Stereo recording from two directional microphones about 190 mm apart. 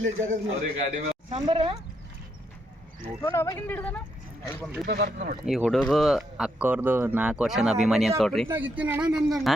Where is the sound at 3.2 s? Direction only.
15° left (ahead or behind).